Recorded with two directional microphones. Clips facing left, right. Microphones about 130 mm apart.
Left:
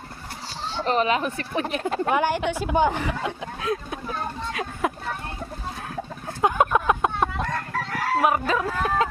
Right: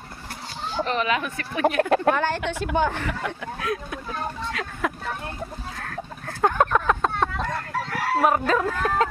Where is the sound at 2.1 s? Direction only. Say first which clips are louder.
Left 2 dB; 15° left (ahead or behind).